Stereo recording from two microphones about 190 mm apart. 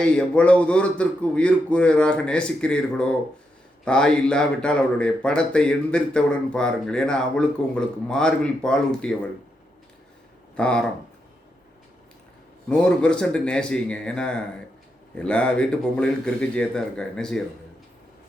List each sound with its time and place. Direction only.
0.0 s speech: 5° left (ahead or behind)
10.6 s speech: 5° left (ahead or behind)
12.6 s speech: 5° left (ahead or behind)